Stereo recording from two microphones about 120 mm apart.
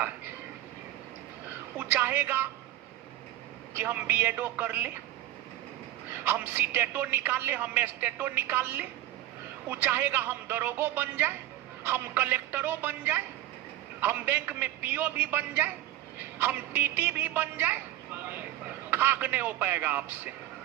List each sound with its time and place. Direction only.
1.8 s speech: 15° right (ahead or behind)
3.8 s speech: 15° right (ahead or behind)
6.1 s a woman's voice: 15° right (ahead or behind)